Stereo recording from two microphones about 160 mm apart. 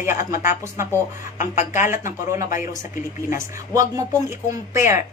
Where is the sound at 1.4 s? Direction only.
50° left (ahead or behind).